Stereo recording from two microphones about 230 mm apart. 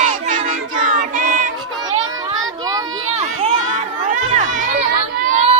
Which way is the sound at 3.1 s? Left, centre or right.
Right.